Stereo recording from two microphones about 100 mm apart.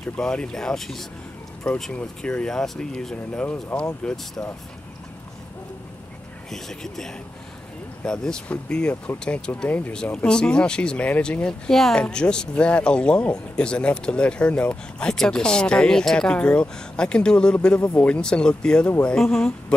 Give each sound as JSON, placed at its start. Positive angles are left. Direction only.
{"t": 0.2, "sound": "speech", "side_deg": 5}
{"t": 3.6, "sound": "speech", "side_deg": 20}
{"t": 6.5, "sound": "speech", "side_deg": 5}